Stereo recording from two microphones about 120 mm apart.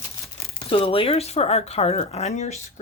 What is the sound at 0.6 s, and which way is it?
Speech, 45° left (ahead or behind).